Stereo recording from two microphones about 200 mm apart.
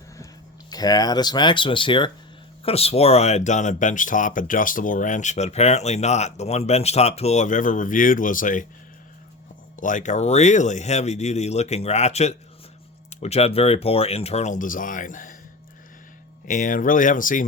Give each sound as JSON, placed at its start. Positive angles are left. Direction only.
{"t": 0.7, "sound": "speech", "side_deg": 20}
{"t": 9.8, "sound": "speech", "side_deg": 40}
{"t": 16.5, "sound": "speech", "side_deg": 40}